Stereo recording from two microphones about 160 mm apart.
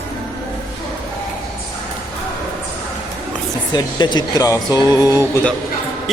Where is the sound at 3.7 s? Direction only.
25° left (ahead or behind).